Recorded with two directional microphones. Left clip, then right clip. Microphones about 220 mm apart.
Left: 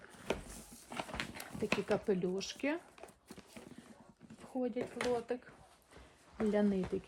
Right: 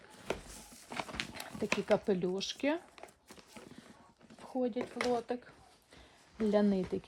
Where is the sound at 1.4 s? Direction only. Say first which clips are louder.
Right 1 dB; 45° right (ahead or behind).